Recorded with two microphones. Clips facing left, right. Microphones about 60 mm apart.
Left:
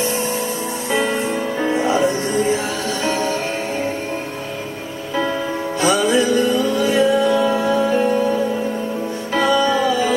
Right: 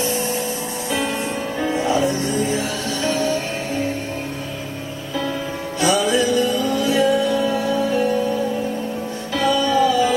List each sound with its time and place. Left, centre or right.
0.9 s music: left
5.8 s music: left
9.3 s music: left